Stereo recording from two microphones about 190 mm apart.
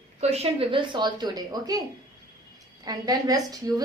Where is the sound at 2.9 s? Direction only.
20° right (ahead or behind).